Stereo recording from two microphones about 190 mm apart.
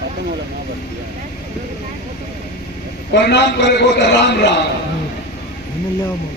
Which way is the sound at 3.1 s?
65° left (ahead or behind).